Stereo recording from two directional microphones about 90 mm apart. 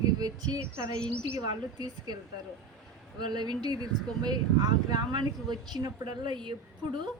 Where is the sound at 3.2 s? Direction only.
55° right (ahead or behind).